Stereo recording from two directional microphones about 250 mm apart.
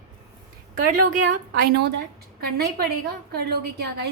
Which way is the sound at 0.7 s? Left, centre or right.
Right.